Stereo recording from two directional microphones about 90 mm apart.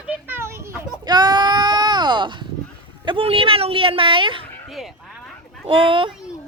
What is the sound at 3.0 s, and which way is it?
A woman's voice, 85° right.